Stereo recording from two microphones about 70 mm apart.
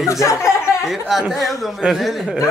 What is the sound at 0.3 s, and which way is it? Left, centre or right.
Speech, left.